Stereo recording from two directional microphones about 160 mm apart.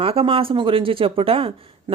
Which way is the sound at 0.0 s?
35° right (ahead or behind).